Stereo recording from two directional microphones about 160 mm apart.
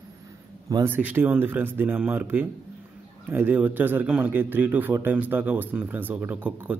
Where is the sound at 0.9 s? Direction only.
10° right (ahead or behind).